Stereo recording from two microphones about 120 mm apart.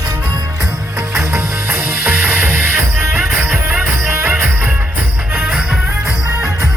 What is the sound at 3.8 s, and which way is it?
Music, 20° right (ahead or behind).